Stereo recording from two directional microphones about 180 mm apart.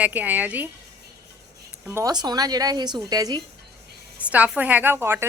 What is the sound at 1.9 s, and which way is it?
Speech, 15° right (ahead or behind).